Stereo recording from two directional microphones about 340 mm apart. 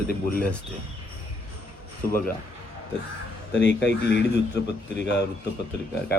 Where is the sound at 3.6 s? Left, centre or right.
Left.